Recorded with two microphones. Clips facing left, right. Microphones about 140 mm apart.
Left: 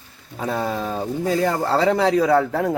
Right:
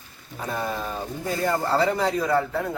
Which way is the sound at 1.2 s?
90° left.